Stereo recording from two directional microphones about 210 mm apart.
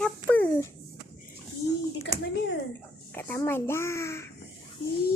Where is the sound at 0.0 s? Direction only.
10° left (ahead or behind).